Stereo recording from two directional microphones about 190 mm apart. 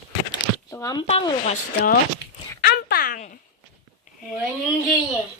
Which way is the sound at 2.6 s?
50° left (ahead or behind).